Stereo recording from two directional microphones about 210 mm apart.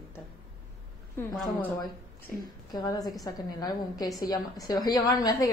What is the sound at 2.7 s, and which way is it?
A woman's voice, 15° left (ahead or behind).